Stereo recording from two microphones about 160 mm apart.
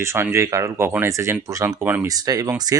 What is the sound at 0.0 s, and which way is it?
Speech, 15° right (ahead or behind).